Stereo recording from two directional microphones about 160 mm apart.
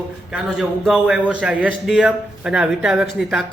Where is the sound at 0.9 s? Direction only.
5° right (ahead or behind).